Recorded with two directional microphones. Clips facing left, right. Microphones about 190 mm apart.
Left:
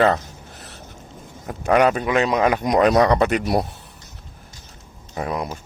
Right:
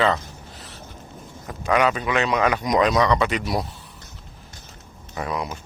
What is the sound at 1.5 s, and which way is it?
Speech, 45° left (ahead or behind).